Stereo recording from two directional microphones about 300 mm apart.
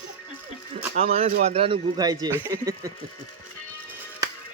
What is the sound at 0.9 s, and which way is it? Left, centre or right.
Speech, right.